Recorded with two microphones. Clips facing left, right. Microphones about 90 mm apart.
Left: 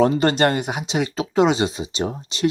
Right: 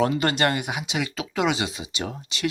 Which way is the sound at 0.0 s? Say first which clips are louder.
Left 5 dB; 35° left (ahead or behind).